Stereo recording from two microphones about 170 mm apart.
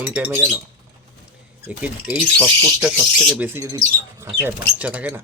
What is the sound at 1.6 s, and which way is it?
Speech, 10° right (ahead or behind).